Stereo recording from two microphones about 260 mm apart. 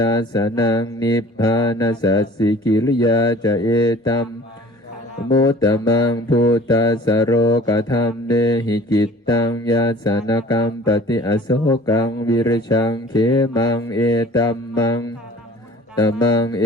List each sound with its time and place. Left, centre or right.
0.0 s mantra: centre
5.3 s mantra: centre